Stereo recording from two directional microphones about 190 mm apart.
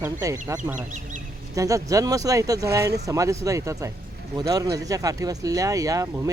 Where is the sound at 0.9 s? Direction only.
40° right (ahead or behind).